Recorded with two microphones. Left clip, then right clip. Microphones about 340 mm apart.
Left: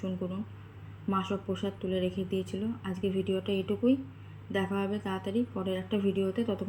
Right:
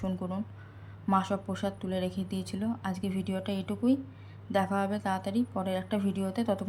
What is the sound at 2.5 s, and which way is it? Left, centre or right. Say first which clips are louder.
Speech: right 1 dB; centre.